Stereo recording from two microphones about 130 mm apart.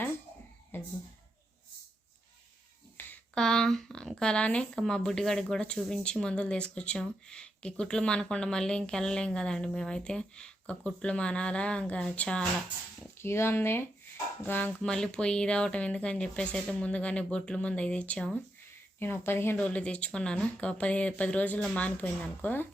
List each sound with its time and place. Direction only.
0.7 s speech: 15° left (ahead or behind)
3.0 s speech: 10° left (ahead or behind)